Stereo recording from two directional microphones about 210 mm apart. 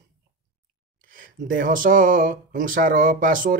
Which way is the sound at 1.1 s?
40° right (ahead or behind).